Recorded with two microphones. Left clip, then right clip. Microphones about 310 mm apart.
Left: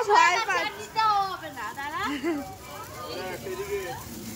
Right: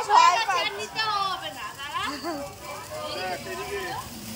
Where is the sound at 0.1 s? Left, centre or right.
Centre.